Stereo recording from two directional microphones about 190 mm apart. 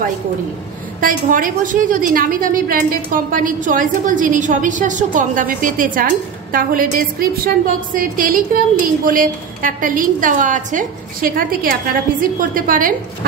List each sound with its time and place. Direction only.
1.0 s a woman's voice: 45° right (ahead or behind)